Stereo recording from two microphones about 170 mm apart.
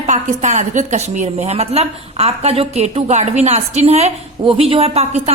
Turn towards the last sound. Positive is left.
turn(degrees=-35)  # may be behind; listen again after turning